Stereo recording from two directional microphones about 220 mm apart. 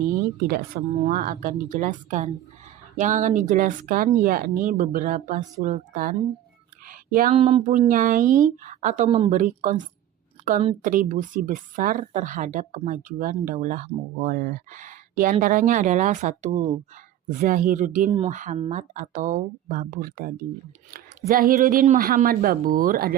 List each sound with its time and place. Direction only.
0.4 s a woman's voice: 40° right (ahead or behind)
6.8 s a sound: 40° right (ahead or behind)
7.3 s a woman's voice: 30° right (ahead or behind)